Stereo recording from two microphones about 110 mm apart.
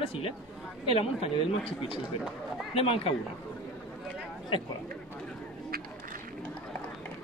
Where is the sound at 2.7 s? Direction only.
60° left (ahead or behind).